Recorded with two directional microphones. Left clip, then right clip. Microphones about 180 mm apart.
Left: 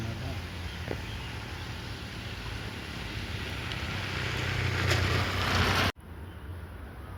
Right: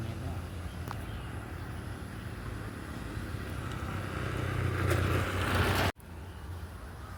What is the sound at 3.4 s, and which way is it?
Vehicle, 70° right (ahead or behind).